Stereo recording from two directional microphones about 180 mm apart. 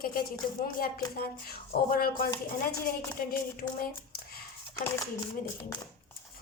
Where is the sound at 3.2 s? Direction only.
55° left (ahead or behind).